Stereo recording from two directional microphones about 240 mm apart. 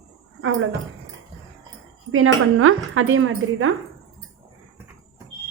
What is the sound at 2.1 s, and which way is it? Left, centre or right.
A woman's voice, right.